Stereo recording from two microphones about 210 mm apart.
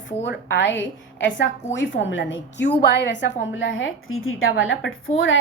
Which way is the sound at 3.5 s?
70° left (ahead or behind).